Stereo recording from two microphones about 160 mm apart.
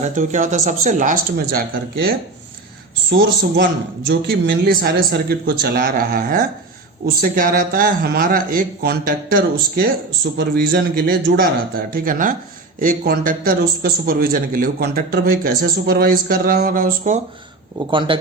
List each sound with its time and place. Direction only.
0.0 s speech: 50° right (ahead or behind)
1.4 s speech: 70° right (ahead or behind)
3.1 s a man's voice: 90° right; by 9.9 s 65° right (ahead or behind)
10.3 s a man's voice: 75° right (ahead or behind)
17.7 s speech: 30° right (ahead or behind)